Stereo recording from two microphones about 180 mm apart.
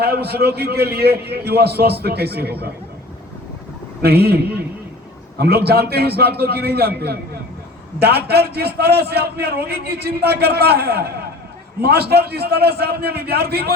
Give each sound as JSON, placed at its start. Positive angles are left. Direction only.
{"t": 0.0, "sound": "a man's voice", "side_deg": -60}
{"t": 4.0, "sound": "a man's voice", "side_deg": -60}
{"t": 5.4, "sound": "a man's voice", "side_deg": -60}